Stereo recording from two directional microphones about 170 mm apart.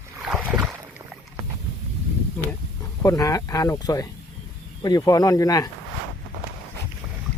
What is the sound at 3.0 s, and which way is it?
Speech, 20° left (ahead or behind).